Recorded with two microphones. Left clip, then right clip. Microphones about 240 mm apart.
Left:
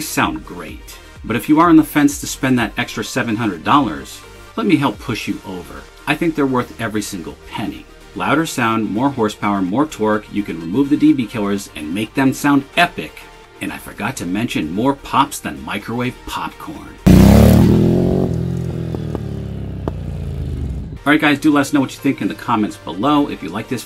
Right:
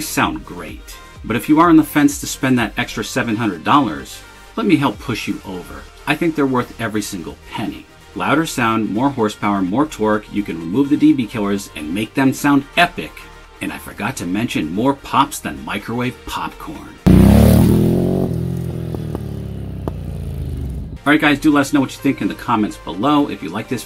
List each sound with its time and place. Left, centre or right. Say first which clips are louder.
0.0 s speech: even; centre
17.1 s music: left 2 dB; left
17.6 s music: left 1 dB; right
19.9 s vehicle: left 2 dB; right
21.0 s speech: even; centre